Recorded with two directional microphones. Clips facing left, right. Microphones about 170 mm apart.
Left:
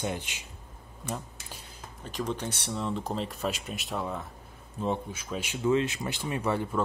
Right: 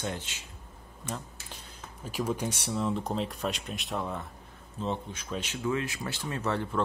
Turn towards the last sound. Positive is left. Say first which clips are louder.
# left 2 dB
turn(degrees=10)  # may be behind; listen again after turning